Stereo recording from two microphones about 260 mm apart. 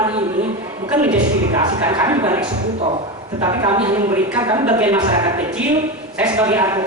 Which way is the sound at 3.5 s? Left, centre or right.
Right.